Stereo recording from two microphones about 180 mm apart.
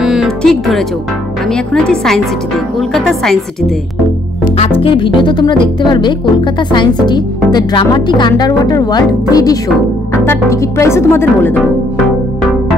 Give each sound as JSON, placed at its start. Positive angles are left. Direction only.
{"t": 0.0, "sound": "music", "side_deg": -5}
{"t": 1.5, "sound": "a woman's voice", "side_deg": 5}
{"t": 4.6, "sound": "speech", "side_deg": 30}